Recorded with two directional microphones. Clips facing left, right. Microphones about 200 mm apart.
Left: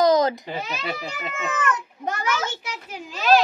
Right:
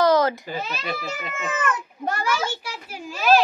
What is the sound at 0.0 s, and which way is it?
Speech, 15° left (ahead or behind).